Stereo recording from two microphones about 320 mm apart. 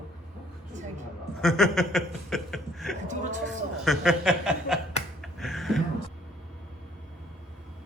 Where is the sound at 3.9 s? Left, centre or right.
Centre.